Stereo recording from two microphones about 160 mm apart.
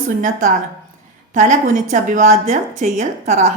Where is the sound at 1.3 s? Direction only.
50° right (ahead or behind).